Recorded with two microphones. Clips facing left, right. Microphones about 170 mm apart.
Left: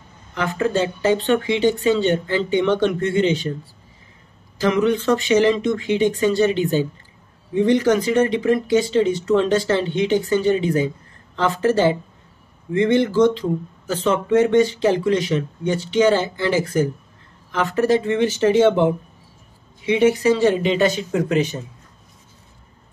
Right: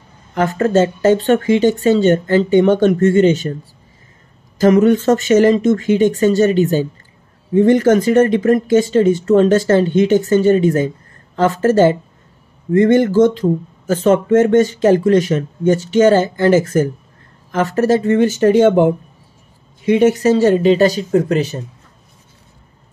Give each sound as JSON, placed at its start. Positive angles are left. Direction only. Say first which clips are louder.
{"t": 0.3, "sound": "speech", "louder": "right 6 dB", "side_deg": -45}
{"t": 4.6, "sound": "speech", "louder": "right 7 dB", "side_deg": -45}